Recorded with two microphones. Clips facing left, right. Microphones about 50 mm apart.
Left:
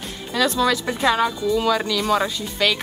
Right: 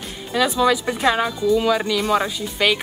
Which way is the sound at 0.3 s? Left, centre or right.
Centre.